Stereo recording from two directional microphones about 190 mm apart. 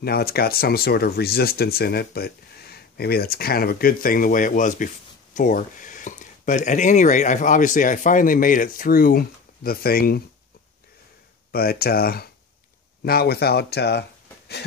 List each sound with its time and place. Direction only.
0.0 s speech: 55° left (ahead or behind)
11.5 s speech: 55° left (ahead or behind)